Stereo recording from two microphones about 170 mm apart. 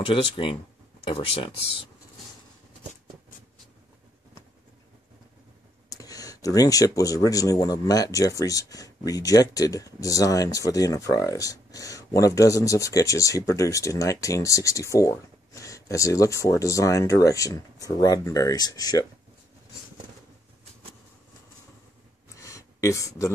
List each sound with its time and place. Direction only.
0.1 s speech: 30° left (ahead or behind)
5.9 s speech: 20° left (ahead or behind)
22.4 s a sound: 20° left (ahead or behind)